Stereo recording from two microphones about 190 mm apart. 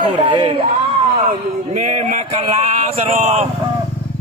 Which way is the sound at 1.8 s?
40° right (ahead or behind).